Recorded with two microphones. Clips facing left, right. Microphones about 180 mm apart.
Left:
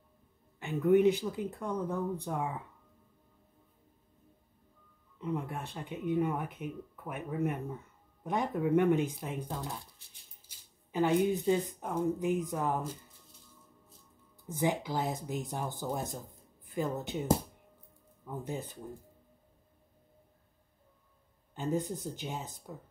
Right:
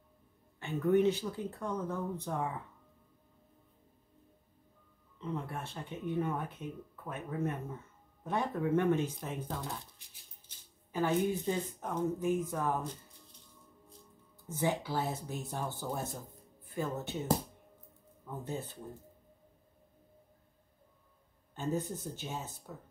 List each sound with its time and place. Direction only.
0.6 s speech: 15° left (ahead or behind)
5.2 s speech: 15° left (ahead or behind)
10.4 s speech: 15° left (ahead or behind)
14.6 s speech: 15° left (ahead or behind)
21.5 s speech: 10° left (ahead or behind)